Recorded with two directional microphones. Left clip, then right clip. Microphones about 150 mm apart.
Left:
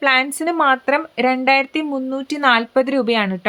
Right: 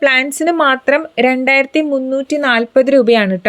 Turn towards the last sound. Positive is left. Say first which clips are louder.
# right 8 dB
turn(degrees=-25)  # may be behind; listen again after turning